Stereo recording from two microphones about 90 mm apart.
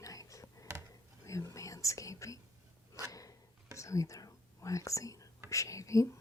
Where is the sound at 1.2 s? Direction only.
35° left (ahead or behind).